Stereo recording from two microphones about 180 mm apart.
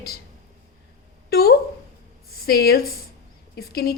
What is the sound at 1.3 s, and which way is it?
A woman's voice, 60° left (ahead or behind).